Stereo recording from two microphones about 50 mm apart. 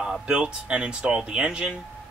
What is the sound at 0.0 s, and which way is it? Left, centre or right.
Speech, centre.